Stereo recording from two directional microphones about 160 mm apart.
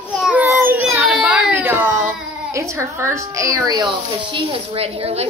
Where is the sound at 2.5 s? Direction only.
20° right (ahead or behind); by 5.2 s 40° right (ahead or behind).